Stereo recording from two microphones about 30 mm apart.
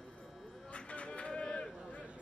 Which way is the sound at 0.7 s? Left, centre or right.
Left.